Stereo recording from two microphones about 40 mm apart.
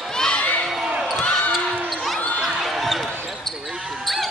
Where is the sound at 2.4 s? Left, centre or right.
Centre.